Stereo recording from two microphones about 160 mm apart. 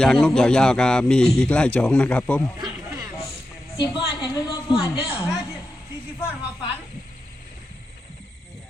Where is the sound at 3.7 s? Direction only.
30° left (ahead or behind).